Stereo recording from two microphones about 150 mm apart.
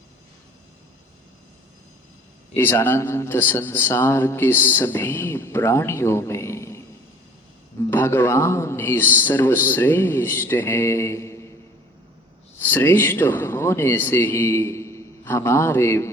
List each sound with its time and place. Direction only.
2.6 s a man's voice: 15° left (ahead or behind)
7.9 s a man's voice: 15° left (ahead or behind)
12.5 s speech: 15° left (ahead or behind)